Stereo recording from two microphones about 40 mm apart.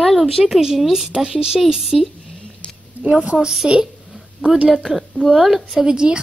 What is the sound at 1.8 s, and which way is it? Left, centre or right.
Speech, centre.